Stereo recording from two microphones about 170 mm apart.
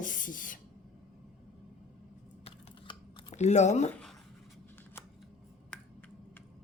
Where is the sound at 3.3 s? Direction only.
40° left (ahead or behind).